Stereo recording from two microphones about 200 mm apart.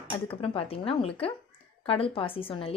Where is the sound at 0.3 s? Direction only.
25° left (ahead or behind).